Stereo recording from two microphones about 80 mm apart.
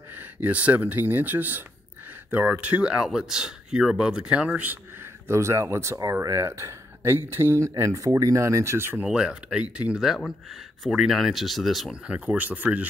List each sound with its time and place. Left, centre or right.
0.1 s speech: right
5.3 s speech: right
9.0 s speech: centre
12.1 s speech: centre